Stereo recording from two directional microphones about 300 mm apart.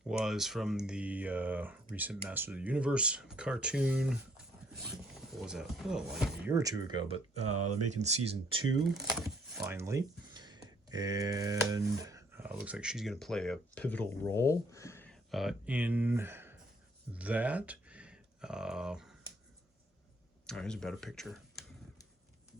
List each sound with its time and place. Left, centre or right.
0.1 s speech: centre
7.4 s speech: right
7.9 s speech: right
8.8 s speech: centre
20.5 s speech: centre